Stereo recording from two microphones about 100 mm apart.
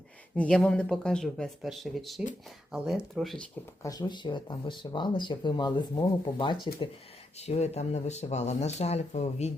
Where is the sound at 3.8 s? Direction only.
40° left (ahead or behind).